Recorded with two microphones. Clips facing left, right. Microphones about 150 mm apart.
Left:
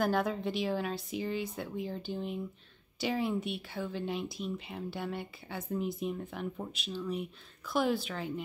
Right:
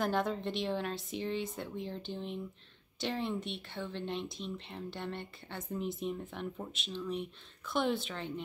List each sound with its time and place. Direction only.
0.0 s speech: 5° left (ahead or behind)